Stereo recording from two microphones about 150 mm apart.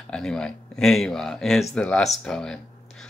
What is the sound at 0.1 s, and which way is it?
Speech, 5° left (ahead or behind).